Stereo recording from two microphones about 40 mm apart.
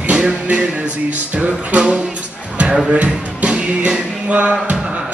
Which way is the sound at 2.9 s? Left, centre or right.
Right.